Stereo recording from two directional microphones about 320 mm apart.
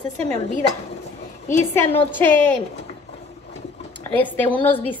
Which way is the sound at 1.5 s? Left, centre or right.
Left.